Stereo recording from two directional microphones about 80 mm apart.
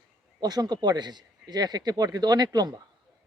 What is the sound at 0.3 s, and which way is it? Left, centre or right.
Speech, right.